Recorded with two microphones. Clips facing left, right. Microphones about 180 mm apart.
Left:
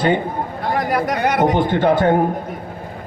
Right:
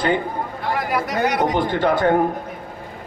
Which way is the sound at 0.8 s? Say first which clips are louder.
Left 2 dB; 45° left (ahead or behind).